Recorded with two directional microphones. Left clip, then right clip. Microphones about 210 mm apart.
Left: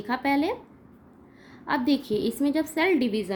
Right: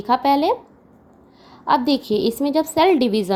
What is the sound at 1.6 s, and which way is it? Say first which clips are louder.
A woman's voice: right 8 dB; 20° right (ahead or behind).